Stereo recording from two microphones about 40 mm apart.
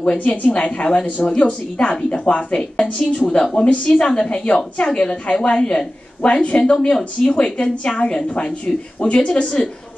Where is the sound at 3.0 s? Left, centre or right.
Centre.